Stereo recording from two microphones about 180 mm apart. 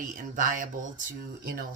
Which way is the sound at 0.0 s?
50° right (ahead or behind).